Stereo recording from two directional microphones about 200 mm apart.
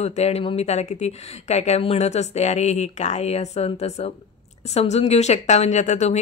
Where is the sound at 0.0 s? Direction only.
35° left (ahead or behind).